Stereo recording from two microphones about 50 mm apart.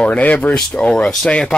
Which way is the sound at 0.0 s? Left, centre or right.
Left.